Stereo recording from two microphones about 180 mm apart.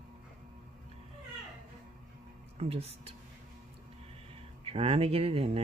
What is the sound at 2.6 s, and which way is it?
Speech, 35° right (ahead or behind).